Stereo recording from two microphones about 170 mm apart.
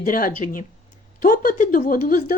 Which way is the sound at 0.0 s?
55° left (ahead or behind).